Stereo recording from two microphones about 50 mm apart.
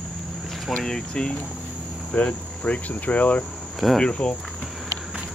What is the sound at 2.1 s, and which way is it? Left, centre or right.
Speech, left.